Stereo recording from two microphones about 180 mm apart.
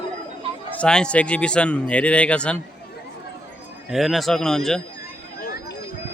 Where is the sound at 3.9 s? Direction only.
Centre (ahead or behind).